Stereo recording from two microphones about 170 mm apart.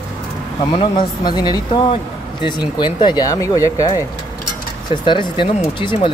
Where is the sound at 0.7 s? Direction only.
25° left (ahead or behind).